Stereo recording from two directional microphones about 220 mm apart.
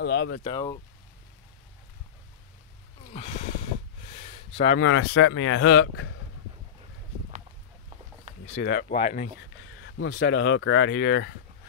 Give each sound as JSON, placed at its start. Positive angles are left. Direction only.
{"t": 0.0, "sound": "speech", "side_deg": 50}
{"t": 0.4, "sound": "speech", "side_deg": 20}
{"t": 3.1, "sound": "speech", "side_deg": 30}
{"t": 4.3, "sound": "a sound", "side_deg": 30}
{"t": 4.7, "sound": "speech", "side_deg": 60}
{"t": 8.5, "sound": "speech", "side_deg": 45}
{"t": 8.9, "sound": "speech", "side_deg": 30}
{"t": 9.8, "sound": "speech", "side_deg": 55}